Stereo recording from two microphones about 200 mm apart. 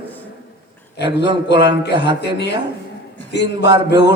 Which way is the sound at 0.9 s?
55° left (ahead or behind).